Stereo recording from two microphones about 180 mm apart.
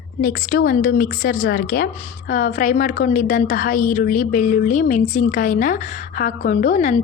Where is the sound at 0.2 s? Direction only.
50° left (ahead or behind).